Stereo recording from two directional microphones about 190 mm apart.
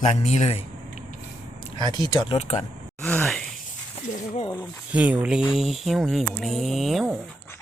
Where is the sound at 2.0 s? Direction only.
25° left (ahead or behind).